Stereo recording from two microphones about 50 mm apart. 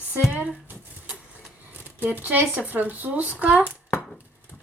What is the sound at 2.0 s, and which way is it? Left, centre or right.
A woman's voice, right.